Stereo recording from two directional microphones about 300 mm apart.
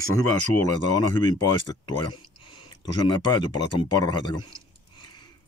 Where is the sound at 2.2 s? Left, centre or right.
Centre.